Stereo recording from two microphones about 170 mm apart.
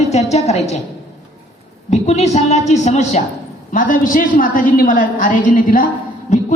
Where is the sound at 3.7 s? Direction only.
50° left (ahead or behind).